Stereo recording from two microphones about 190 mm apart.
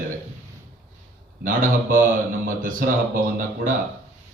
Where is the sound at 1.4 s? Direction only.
45° right (ahead or behind).